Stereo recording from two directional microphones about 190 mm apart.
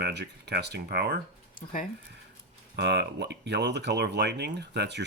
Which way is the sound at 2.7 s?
65° right (ahead or behind).